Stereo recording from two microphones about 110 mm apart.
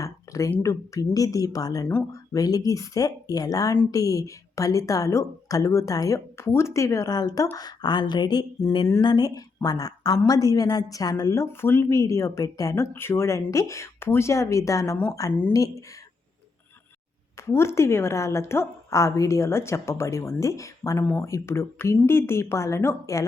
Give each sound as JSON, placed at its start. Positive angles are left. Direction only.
{"t": 0.0, "sound": "a sound", "side_deg": 30}
{"t": 0.6, "sound": "a woman's voice", "side_deg": 30}
{"t": 17.4, "sound": "a woman's voice", "side_deg": 25}